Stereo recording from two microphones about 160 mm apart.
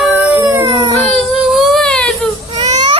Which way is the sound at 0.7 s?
30° right (ahead or behind).